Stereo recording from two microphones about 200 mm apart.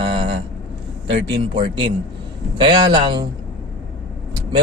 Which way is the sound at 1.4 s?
25° right (ahead or behind).